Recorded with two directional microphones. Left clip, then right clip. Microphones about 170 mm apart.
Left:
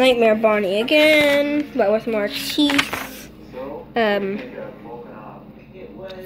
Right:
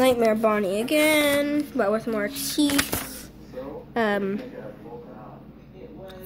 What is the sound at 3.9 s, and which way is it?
Speech, 10° right (ahead or behind).